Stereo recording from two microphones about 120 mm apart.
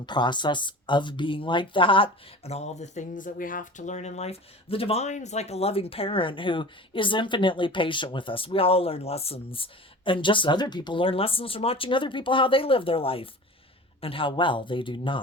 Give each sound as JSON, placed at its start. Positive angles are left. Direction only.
{"t": 0.0, "sound": "speech", "side_deg": 40}